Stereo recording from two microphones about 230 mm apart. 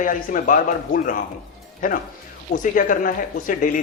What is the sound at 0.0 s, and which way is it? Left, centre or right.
Speech, left.